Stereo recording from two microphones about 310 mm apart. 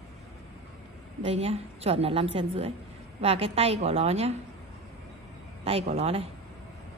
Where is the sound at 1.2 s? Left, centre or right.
Centre.